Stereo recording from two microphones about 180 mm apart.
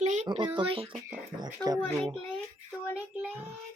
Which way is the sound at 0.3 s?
25° right (ahead or behind).